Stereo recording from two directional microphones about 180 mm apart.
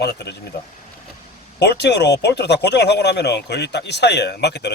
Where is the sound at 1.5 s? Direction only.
70° left (ahead or behind).